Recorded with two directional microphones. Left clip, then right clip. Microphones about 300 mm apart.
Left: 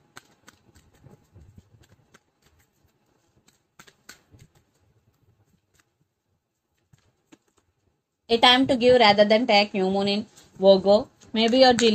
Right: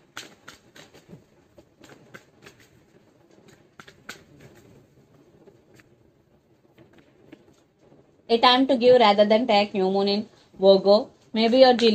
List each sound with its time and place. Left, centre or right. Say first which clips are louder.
8.3 s a woman's voice: even; left